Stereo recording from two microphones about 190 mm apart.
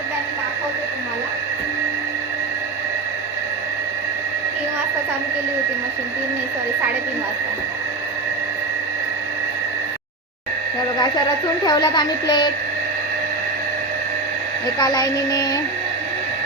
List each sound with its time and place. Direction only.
11.6 s speech: 20° left (ahead or behind)
14.8 s speech: 20° left (ahead or behind)